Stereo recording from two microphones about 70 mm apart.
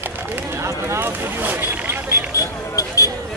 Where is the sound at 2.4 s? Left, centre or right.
Left.